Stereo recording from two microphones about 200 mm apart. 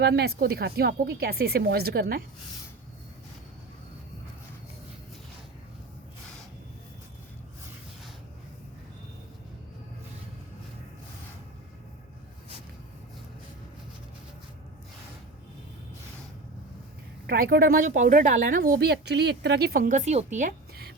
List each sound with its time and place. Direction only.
0.0 s speech: 55° right (ahead or behind)
17.2 s speech: 50° right (ahead or behind)